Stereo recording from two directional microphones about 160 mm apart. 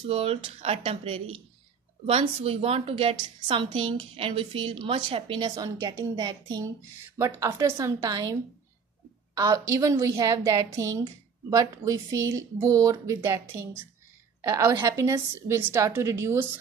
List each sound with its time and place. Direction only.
0.0 s a woman's voice: 40° right (ahead or behind)
5.6 s speech: 20° right (ahead or behind)
9.4 s speech: 20° right (ahead or behind)
14.6 s a woman's voice: 15° right (ahead or behind)